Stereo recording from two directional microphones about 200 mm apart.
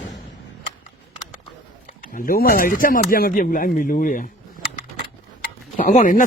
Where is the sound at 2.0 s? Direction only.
45° left (ahead or behind).